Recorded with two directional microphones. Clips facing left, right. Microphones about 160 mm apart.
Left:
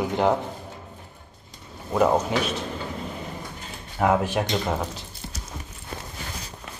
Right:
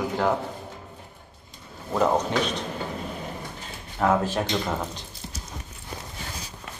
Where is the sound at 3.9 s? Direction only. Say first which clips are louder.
Left 1 dB; 15° left (ahead or behind).